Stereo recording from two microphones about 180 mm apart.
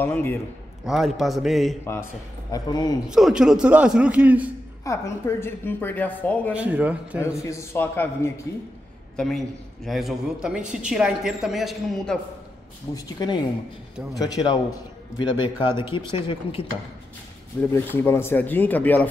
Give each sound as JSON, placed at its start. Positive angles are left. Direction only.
{"t": 0.0, "sound": "speech", "side_deg": 10}
{"t": 0.8, "sound": "a woman's voice", "side_deg": 0}
{"t": 2.5, "sound": "a man's voice", "side_deg": 20}
{"t": 3.1, "sound": "a woman's voice", "side_deg": 0}
{"t": 4.8, "sound": "speech", "side_deg": 15}
{"t": 6.5, "sound": "speech", "side_deg": -10}
{"t": 7.4, "sound": "speech", "side_deg": 15}
{"t": 9.1, "sound": "a man's voice", "side_deg": 0}
{"t": 12.9, "sound": "a man's voice", "side_deg": 20}
{"t": 17.7, "sound": "speech", "side_deg": 10}